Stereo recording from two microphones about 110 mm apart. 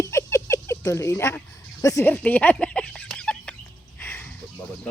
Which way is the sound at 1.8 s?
30° left (ahead or behind).